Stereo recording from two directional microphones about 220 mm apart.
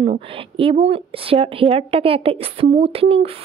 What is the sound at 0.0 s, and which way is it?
Speech, 25° right (ahead or behind).